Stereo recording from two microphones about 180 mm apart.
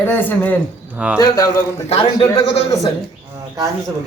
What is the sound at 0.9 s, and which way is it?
Speech, 5° right (ahead or behind).